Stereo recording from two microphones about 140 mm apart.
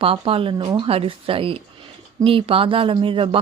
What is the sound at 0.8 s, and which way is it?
Speech, 45° right (ahead or behind).